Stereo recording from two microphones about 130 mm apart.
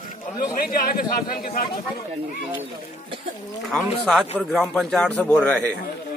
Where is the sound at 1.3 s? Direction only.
90° left.